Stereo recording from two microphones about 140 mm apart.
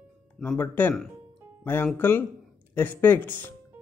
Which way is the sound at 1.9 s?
15° left (ahead or behind).